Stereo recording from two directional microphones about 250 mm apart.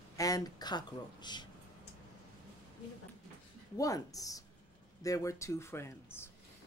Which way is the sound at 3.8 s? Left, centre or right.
Centre.